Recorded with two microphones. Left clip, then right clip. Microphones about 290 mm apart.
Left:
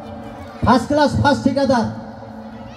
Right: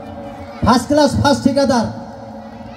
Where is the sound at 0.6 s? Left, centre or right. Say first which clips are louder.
Right 2 dB; right.